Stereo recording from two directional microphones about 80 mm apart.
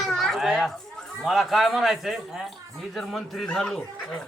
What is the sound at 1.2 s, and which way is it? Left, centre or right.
A man's voice, centre.